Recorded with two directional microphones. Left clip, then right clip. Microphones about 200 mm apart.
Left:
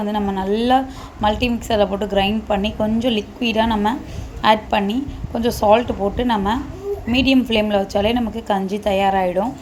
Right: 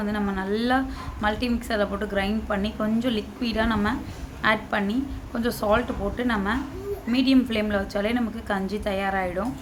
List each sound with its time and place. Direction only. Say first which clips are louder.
0.0 s a woman's voice: left 7 dB; 15° left (ahead or behind)